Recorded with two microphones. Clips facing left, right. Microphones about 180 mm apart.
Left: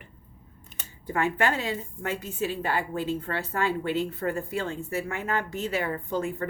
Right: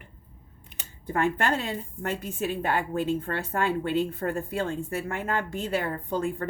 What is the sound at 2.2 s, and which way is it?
A woman's voice, 55° right (ahead or behind).